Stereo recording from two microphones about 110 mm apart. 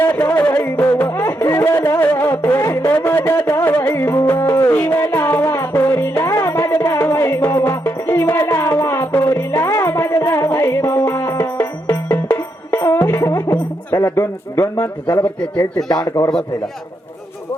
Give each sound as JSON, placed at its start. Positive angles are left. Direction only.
{"t": 0.0, "sound": "music", "side_deg": 15}
{"t": 15.2, "sound": "speech", "side_deg": 15}
{"t": 15.9, "sound": "speech", "side_deg": 35}